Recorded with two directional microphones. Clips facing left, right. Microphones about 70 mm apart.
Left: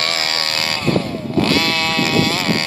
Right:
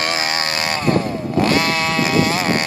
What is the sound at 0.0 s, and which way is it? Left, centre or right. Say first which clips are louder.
Chainsaw: right 2 dB; centre.